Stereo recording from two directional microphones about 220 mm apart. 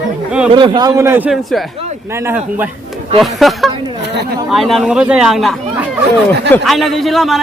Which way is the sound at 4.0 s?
50° right (ahead or behind).